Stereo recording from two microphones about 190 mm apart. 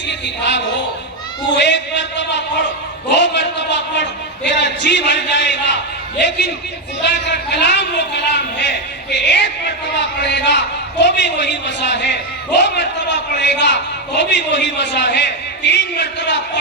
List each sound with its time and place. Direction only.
0.1 s a man's voice: 65° left (ahead or behind)